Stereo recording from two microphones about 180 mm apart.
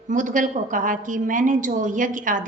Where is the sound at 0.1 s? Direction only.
45° right (ahead or behind).